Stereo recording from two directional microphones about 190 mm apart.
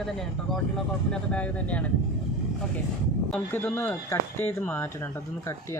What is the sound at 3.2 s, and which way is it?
Speech, 5° left (ahead or behind).